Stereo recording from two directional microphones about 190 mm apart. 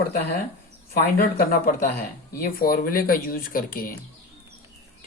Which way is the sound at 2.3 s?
50° left (ahead or behind).